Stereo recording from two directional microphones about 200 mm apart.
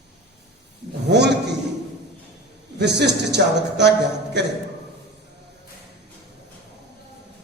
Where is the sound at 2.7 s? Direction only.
55° right (ahead or behind).